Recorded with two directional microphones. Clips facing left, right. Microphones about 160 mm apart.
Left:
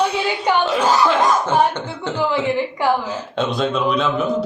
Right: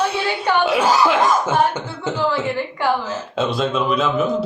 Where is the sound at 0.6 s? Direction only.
10° right (ahead or behind).